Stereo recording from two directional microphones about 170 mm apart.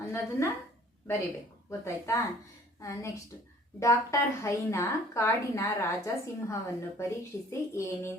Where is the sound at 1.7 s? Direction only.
15° left (ahead or behind).